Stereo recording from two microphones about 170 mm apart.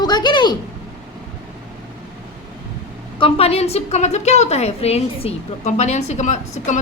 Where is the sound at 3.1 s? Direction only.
35° left (ahead or behind).